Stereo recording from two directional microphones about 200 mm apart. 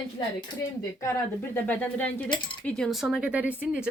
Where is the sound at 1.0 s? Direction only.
10° left (ahead or behind).